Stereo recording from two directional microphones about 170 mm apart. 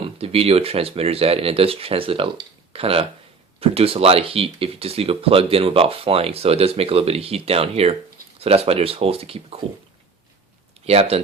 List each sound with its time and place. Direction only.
0.0 s speech: 35° right (ahead or behind)
10.8 s speech: 35° right (ahead or behind)